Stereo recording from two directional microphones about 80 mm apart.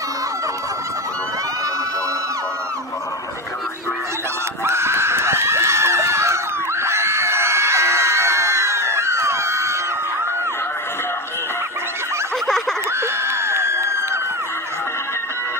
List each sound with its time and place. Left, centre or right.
4.6 s screaming: right
13.0 s screaming: right